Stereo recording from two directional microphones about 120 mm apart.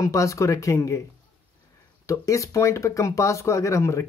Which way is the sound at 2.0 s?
25° left (ahead or behind).